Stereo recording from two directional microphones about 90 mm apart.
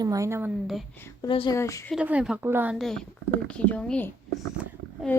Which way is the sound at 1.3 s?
70° left (ahead or behind).